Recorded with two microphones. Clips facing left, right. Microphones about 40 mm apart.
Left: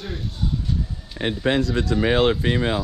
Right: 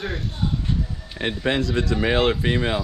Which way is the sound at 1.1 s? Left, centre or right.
Right.